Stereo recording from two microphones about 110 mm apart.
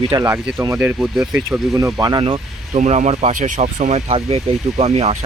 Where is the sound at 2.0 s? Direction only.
40° right (ahead or behind).